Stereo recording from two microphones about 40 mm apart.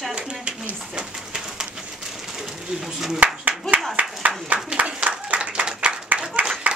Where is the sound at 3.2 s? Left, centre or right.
Right.